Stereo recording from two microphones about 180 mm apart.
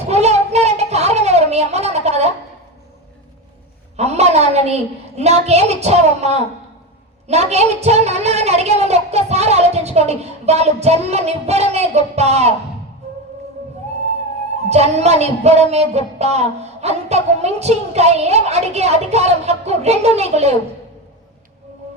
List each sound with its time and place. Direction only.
0.1 s a sound: 35° right (ahead or behind)
3.9 s a woman's voice: 35° right (ahead or behind)
14.6 s a woman's voice: 35° right (ahead or behind)